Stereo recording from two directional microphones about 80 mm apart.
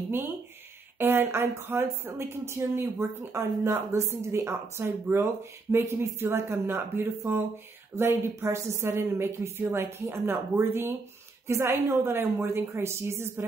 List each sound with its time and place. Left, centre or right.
0.9 s a woman's voice: right